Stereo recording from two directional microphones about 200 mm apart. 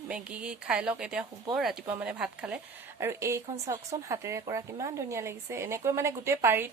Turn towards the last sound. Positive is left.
turn(degrees=-10)  # may be behind; listen again after turning